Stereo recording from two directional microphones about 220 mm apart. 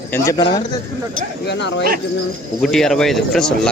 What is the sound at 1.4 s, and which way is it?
Speech, 50° left (ahead or behind).